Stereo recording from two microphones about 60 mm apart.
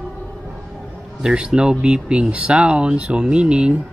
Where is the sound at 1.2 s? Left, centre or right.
Centre.